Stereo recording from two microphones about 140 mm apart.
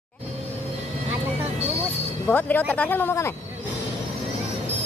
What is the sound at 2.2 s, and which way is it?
Speech, 10° left (ahead or behind).